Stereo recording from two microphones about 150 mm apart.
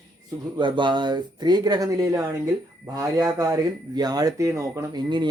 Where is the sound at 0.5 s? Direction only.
30° right (ahead or behind).